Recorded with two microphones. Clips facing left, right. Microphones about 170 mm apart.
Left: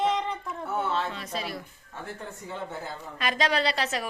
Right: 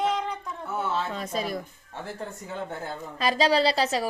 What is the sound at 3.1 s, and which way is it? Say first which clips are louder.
Speech: right 4 dB; 35° right (ahead or behind).